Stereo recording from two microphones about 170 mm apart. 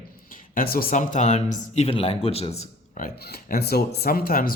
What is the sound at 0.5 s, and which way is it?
Speech, 60° left (ahead or behind).